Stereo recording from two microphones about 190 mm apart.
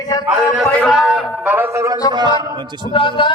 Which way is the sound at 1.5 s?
10° right (ahead or behind).